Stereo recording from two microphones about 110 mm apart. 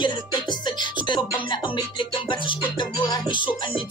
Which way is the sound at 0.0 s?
45° left (ahead or behind).